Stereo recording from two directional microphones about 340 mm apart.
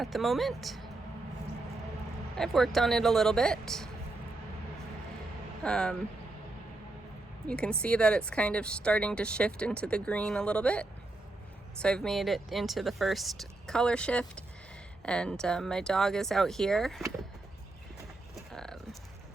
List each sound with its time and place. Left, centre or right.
0.0 s speech: centre
2.4 s speech: centre
5.6 s speech: centre
7.4 s speech: centre
18.3 s a sound: centre